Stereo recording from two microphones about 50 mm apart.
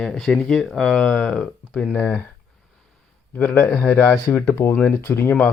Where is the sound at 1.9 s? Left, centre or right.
Left.